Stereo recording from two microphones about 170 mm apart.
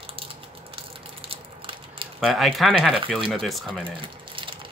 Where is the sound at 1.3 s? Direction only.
30° right (ahead or behind).